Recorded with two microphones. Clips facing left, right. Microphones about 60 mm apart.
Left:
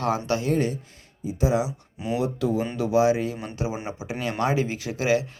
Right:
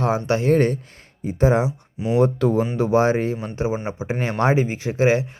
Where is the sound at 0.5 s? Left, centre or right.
Right.